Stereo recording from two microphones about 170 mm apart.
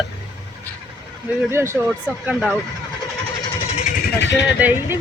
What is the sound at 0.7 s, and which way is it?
Neigh, 10° left (ahead or behind).